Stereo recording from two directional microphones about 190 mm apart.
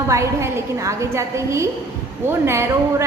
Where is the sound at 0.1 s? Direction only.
15° right (ahead or behind).